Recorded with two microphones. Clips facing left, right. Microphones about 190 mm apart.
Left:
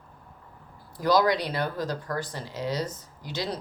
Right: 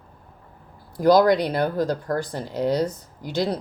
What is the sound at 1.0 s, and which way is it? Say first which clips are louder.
Speech: right 7 dB; 50° right (ahead or behind).